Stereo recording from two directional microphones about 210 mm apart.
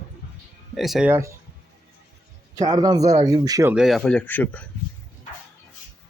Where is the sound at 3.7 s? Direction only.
Centre (ahead or behind).